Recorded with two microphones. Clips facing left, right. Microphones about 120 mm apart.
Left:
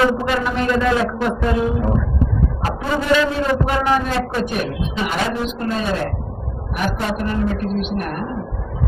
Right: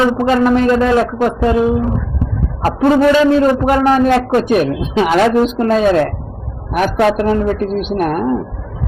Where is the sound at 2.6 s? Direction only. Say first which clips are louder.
Right 11 dB; 45° right (ahead or behind).